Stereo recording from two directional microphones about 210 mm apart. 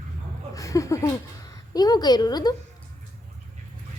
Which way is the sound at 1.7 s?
20° left (ahead or behind).